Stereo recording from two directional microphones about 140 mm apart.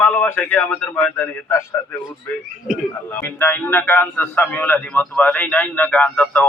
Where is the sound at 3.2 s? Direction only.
15° left (ahead or behind).